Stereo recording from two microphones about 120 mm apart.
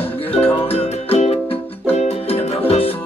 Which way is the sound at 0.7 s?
60° left (ahead or behind).